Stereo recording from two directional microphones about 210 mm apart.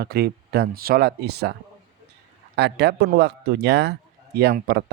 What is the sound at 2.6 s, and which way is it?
Speech, 50° right (ahead or behind).